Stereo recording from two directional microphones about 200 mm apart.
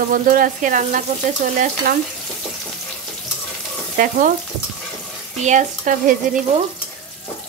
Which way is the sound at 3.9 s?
45° right (ahead or behind).